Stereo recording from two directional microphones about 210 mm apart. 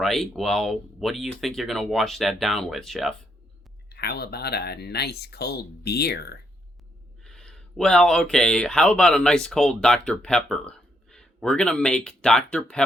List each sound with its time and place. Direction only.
0.0 s speech: centre (ahead or behind)
3.8 s speech: 50° left (ahead or behind)
7.3 s speech: centre (ahead or behind)